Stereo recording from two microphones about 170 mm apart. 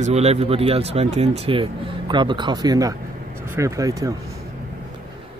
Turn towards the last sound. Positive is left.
turn(degrees=-20)  # may be behind; listen again after turning